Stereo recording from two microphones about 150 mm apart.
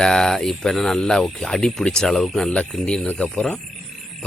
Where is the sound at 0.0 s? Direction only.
5° left (ahead or behind).